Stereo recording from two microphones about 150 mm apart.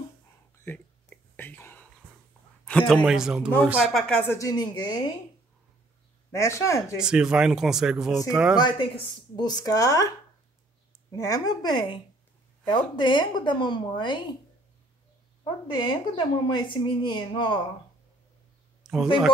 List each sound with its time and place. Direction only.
0.7 s whispering: 10° left (ahead or behind)
2.9 s speech: centre (ahead or behind)
3.9 s speech: 5° left (ahead or behind); by 4.9 s 30° left (ahead or behind)
6.3 s speech: 20° left (ahead or behind)
7.0 s speech: 5° right (ahead or behind)
8.5 s speech: 30° left (ahead or behind)
11.1 s a woman's voice: 20° left (ahead or behind)
15.7 s a woman's voice: 30° left (ahead or behind)
18.8 s a sound: 5° right (ahead or behind)